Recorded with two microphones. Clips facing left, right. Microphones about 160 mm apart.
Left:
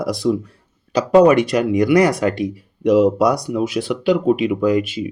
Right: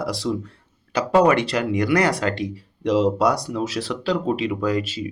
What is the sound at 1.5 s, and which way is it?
Speech, 15° left (ahead or behind).